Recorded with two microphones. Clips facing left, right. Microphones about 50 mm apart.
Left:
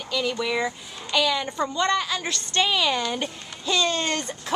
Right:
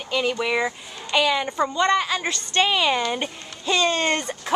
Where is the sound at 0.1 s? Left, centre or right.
Right.